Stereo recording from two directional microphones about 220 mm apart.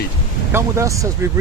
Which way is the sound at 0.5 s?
15° right (ahead or behind).